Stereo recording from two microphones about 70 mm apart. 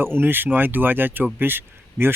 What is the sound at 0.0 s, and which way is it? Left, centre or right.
A man's voice, right.